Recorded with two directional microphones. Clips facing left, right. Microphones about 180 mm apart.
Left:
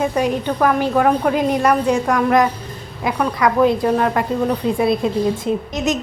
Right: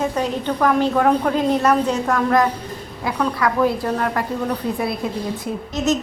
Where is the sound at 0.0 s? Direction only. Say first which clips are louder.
Left 3 dB; 10° left (ahead or behind).